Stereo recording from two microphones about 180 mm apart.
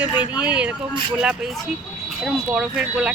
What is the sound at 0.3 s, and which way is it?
Speech, 5° right (ahead or behind).